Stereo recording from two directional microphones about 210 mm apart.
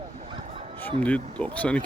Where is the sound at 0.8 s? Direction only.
5° left (ahead or behind).